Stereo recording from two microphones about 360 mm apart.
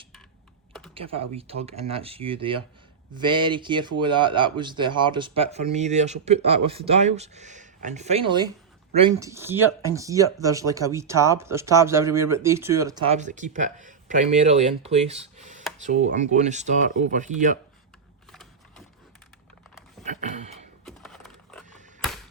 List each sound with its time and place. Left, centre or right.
0.9 s speech: centre
20.1 s a sound: centre
20.8 s computer keyboard: centre